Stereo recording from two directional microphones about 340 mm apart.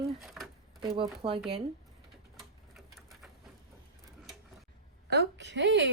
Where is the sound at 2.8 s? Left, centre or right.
Centre.